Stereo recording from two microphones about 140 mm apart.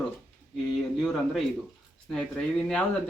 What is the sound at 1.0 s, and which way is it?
Speech, centre (ahead or behind).